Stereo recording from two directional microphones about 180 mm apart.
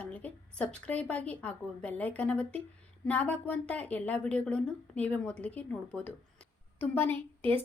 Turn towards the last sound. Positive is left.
turn(degrees=10)  # may be behind; listen again after turning